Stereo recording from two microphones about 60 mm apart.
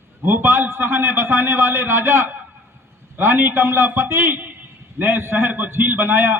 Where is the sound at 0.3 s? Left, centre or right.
Right.